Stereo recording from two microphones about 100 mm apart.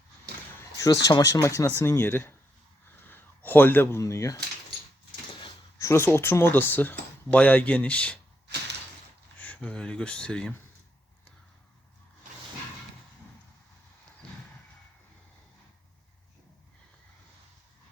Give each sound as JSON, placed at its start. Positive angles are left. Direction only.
{"t": 0.8, "sound": "speech", "side_deg": 35}
{"t": 3.1, "sound": "a sound", "side_deg": 20}
{"t": 4.0, "sound": "speech", "side_deg": 30}
{"t": 5.8, "sound": "speech", "side_deg": 25}
{"t": 9.4, "sound": "speech", "side_deg": 15}